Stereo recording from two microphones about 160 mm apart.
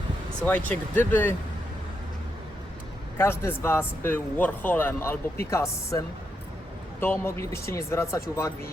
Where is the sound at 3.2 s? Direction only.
15° left (ahead or behind).